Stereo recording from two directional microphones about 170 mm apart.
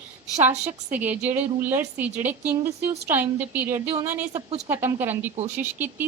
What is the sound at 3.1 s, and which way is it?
A woman's voice, 10° right (ahead or behind).